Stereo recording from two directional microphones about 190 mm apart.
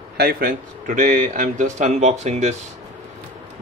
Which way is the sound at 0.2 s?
50° right (ahead or behind).